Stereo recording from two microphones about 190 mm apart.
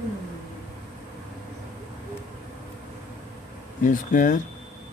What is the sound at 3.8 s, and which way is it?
Speech, 45° left (ahead or behind).